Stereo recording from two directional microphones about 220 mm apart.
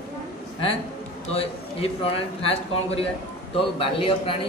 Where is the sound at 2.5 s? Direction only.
25° left (ahead or behind).